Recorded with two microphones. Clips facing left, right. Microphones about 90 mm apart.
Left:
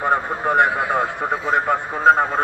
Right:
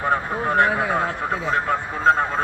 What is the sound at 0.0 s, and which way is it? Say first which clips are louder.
A man's voice: left 2 dB; 10° left (ahead or behind).